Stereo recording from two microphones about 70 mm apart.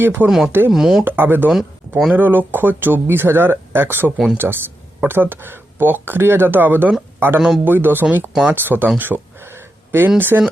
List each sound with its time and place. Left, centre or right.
0.0 s speech: right
0.3 s speech: centre
1.0 s speech: right
7.3 s speech: centre
7.6 s speech: right
8.3 s speech: centre
8.5 s speech: right
9.0 s a sound: right
10.2 s speech: right